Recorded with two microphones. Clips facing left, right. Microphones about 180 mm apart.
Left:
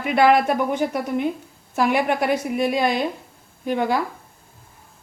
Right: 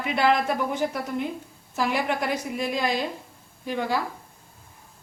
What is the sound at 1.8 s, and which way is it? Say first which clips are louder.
A woman's voice: left 6 dB; 60° left (ahead or behind).